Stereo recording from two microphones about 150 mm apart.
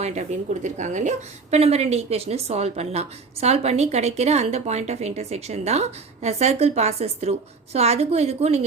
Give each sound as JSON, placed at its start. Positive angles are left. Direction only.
{"t": 0.0, "sound": "a woman's voice", "side_deg": -50}